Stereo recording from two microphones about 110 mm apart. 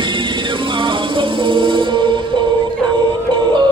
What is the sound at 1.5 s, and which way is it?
Music, 50° right (ahead or behind).